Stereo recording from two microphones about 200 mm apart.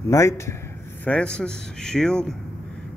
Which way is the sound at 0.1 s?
15° left (ahead or behind).